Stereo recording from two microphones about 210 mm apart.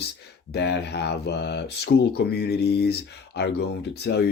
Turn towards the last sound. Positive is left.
turn(degrees=50)  # may be behind; listen again after turning